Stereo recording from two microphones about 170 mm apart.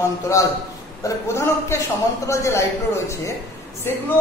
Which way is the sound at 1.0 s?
15° left (ahead or behind).